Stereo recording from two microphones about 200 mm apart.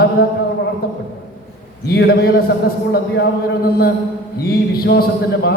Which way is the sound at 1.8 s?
55° left (ahead or behind).